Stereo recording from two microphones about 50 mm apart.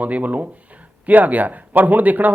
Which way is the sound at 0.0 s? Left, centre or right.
Right.